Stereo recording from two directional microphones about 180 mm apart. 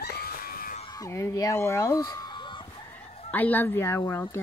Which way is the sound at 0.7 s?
25° left (ahead or behind).